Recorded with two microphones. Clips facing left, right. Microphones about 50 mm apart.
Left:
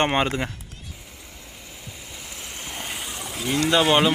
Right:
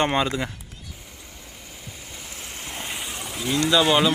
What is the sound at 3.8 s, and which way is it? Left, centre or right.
Speech, left.